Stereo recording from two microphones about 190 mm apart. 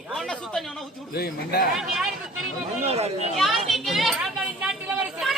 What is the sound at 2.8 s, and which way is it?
Speech, 35° right (ahead or behind).